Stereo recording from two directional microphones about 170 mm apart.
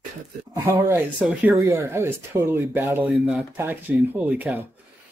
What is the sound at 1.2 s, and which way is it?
Speech, centre (ahead or behind).